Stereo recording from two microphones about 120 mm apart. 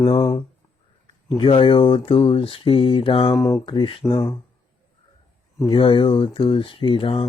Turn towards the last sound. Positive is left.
turn(degrees=45)  # may be behind; listen again after turning